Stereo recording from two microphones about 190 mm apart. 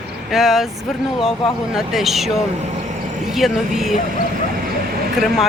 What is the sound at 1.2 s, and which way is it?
Speech, 30° left (ahead or behind).